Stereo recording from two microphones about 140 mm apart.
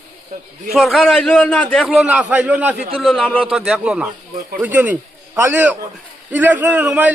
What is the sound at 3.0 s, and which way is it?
A man's voice, 5° left (ahead or behind).